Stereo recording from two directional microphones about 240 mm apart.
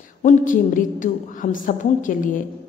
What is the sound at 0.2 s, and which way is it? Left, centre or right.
A woman's voice, left.